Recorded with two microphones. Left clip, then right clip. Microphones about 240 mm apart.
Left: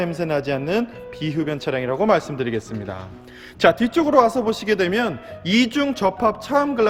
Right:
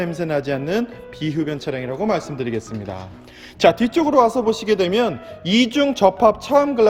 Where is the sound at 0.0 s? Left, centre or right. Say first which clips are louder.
Even; centre.